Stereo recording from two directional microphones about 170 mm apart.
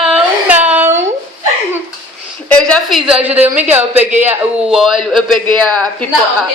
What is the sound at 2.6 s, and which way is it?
Speech, 5° left (ahead or behind).